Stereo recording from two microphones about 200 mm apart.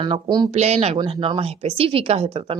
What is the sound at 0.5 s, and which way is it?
A woman's voice, 35° right (ahead or behind).